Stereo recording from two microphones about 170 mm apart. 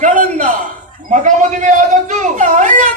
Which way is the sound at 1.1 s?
45° right (ahead or behind).